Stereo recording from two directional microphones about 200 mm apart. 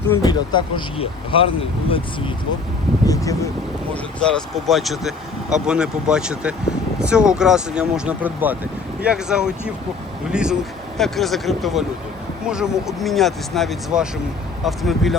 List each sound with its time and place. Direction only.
0.1 s speech: 20° left (ahead or behind)
3.1 s speech: 15° left (ahead or behind)
4.2 s speech: centre (ahead or behind)